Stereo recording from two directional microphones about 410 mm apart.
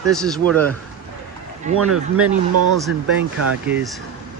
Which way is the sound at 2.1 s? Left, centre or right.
Right.